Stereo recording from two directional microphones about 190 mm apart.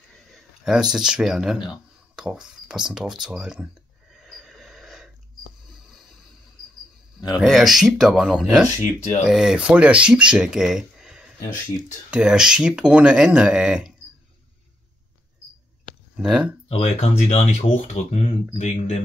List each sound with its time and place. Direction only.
0.3 s speech: centre (ahead or behind)
4.1 s a sound: centre (ahead or behind)
7.3 s speech: centre (ahead or behind)
16.2 s speech: 5° right (ahead or behind)
16.6 s speech: 35° left (ahead or behind)